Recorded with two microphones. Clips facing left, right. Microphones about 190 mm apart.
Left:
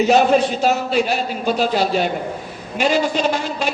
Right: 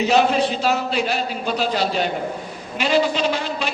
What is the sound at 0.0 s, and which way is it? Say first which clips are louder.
A man's voice: left 3 dB; 50° left (ahead or behind).